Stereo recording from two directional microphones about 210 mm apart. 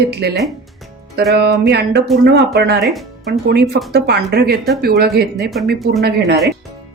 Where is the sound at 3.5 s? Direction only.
50° right (ahead or behind).